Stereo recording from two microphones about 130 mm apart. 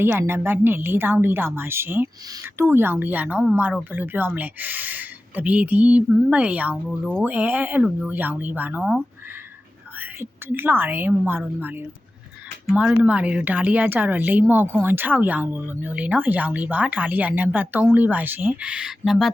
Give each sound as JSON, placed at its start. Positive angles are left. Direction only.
{"t": 0.0, "sound": "speech", "side_deg": -15}
{"t": 10.0, "sound": "speech", "side_deg": -15}